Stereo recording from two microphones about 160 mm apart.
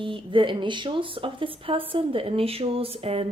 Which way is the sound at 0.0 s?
30° right (ahead or behind).